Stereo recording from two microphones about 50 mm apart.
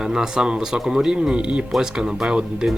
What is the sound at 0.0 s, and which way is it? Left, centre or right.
Speech, centre.